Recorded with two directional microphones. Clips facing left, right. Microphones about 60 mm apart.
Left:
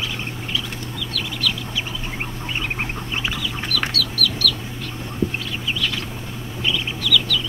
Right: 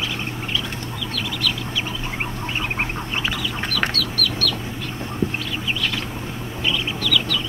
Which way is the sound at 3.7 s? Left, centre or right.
Right.